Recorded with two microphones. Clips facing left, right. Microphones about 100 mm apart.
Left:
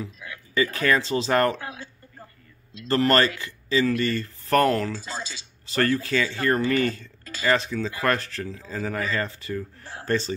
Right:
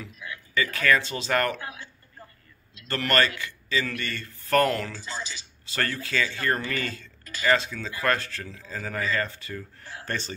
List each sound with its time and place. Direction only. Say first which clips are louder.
0.6 s speech: left 2 dB; 30° left (ahead or behind)
2.9 s speech: left 4 dB; 25° left (ahead or behind)